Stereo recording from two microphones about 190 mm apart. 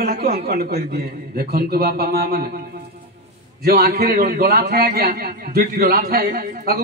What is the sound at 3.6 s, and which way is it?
A man's voice, 50° right (ahead or behind).